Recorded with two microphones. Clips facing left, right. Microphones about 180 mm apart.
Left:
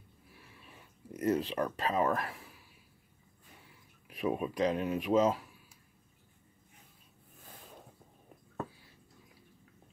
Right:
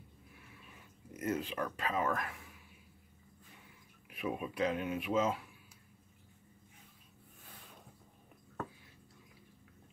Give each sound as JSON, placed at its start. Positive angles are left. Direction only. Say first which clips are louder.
{"t": 1.1, "sound": "speech", "louder": "left 6 dB", "side_deg": 35}
{"t": 4.1, "sound": "speech", "louder": "left 5 dB", "side_deg": 35}